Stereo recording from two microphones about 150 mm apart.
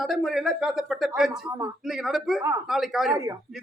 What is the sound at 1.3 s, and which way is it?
Speech, 20° right (ahead or behind).